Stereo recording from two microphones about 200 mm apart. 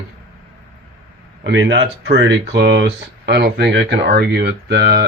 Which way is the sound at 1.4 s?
60° right (ahead or behind).